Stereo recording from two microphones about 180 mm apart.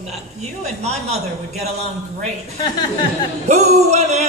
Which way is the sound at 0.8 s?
35° right (ahead or behind).